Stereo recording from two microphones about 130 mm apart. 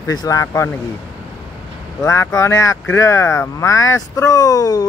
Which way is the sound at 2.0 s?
25° left (ahead or behind).